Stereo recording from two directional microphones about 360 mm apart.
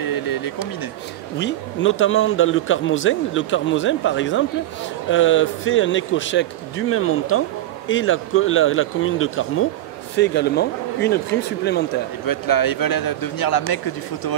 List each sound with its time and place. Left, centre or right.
0.0 s a sound: left
1.4 s speech: left
12.3 s a man's voice: left